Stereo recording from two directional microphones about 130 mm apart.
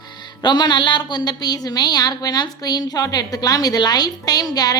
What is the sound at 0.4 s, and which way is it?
A woman's voice, 35° left (ahead or behind).